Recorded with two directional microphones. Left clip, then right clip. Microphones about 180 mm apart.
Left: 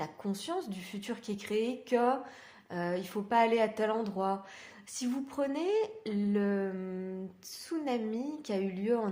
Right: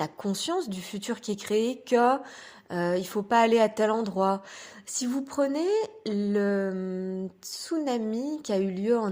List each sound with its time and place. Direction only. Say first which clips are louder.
0.0 s speech: right 8 dB; 45° right (ahead or behind)